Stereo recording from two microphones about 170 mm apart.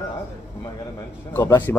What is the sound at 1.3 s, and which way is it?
Speech, 15° left (ahead or behind).